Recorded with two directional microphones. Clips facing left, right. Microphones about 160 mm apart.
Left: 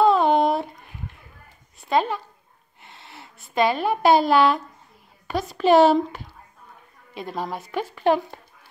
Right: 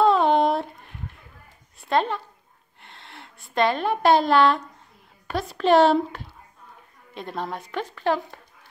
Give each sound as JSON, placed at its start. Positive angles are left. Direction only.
{"t": 0.0, "sound": "a sound", "side_deg": 0}
{"t": 1.8, "sound": "a woman's voice", "side_deg": 0}
{"t": 8.0, "sound": "speech", "side_deg": 15}